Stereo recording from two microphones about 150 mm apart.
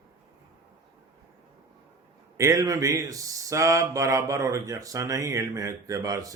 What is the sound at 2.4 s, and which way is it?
Speech, 20° right (ahead or behind).